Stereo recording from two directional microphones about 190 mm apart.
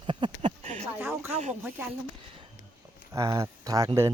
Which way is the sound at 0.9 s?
15° right (ahead or behind).